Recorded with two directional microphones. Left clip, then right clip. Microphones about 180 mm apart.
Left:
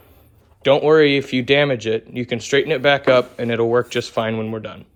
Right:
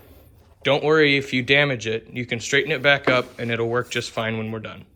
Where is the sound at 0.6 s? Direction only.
15° left (ahead or behind).